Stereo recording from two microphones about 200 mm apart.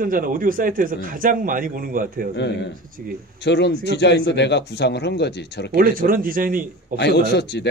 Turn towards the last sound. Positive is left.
turn(degrees=55)  # may be behind; listen again after turning